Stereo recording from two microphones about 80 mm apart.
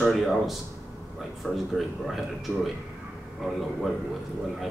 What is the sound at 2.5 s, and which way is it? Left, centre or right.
Speech, left.